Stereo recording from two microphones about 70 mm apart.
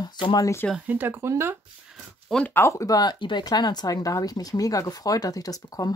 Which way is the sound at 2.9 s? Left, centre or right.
Left.